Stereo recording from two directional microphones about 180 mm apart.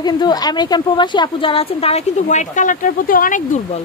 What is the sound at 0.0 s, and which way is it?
A woman's voice, 20° left (ahead or behind).